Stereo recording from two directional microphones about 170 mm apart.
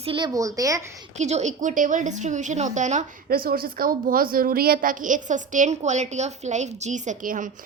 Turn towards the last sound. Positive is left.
turn(degrees=-50)  # may be behind; listen again after turning